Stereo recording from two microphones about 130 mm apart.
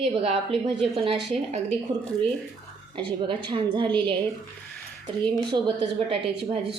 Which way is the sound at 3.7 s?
40° right (ahead or behind).